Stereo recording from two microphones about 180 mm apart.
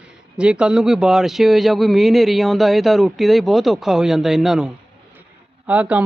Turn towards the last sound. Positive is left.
turn(degrees=-10)  # may be behind; listen again after turning